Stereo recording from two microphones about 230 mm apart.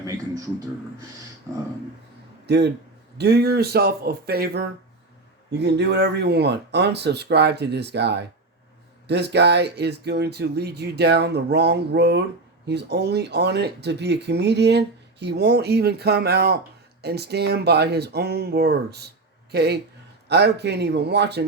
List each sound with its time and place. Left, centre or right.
2.5 s speech: right